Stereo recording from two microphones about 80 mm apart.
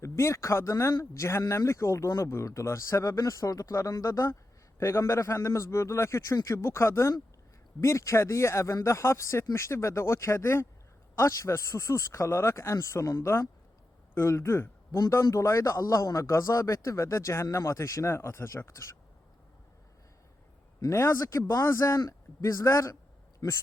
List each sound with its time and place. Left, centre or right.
0.0 s speech: left
20.9 s speech: left
21.2 s speech: left
21.6 s speech: left
23.4 s speech: left